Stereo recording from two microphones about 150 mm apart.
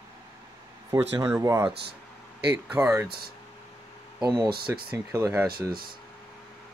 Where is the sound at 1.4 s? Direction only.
25° right (ahead or behind).